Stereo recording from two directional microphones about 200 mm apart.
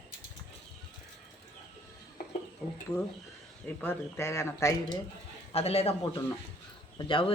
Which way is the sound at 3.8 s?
10° left (ahead or behind).